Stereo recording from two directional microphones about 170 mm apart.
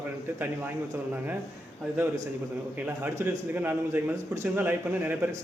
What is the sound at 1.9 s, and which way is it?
A man's voice, 15° right (ahead or behind).